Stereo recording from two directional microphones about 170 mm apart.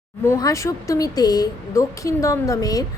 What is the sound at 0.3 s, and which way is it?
A woman's voice, 20° left (ahead or behind).